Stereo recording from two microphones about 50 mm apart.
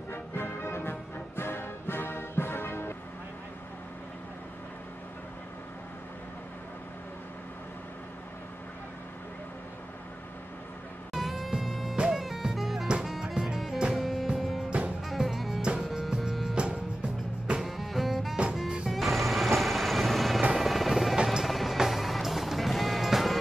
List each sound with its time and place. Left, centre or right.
0.1 s music: left
11.1 s music: centre
15.6 s music: centre
16.5 s music: right
17.6 s music: centre
18.3 s music: centre
18.9 s music: centre
21.5 s music: centre